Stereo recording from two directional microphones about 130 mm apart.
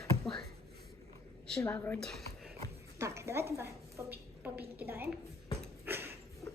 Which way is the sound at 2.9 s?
20° right (ahead or behind).